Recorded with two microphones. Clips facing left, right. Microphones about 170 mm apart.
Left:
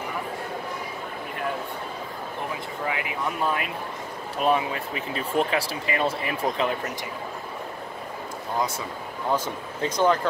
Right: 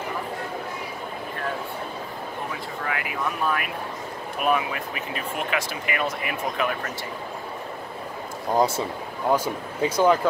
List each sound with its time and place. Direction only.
2.9 s speech: 20° left (ahead or behind)
8.5 s speech: 30° right (ahead or behind)
9.3 s speech: 10° right (ahead or behind)